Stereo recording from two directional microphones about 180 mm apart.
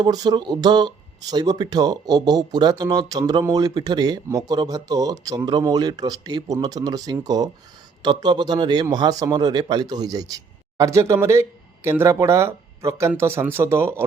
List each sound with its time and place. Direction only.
0.0 s a man's voice: 20° right (ahead or behind)